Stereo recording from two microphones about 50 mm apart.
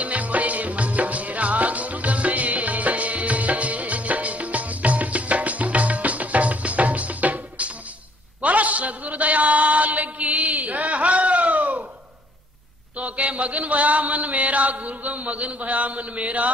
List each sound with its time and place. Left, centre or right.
0.0 s music: right
8.4 s a sound: right
13.0 s chant: right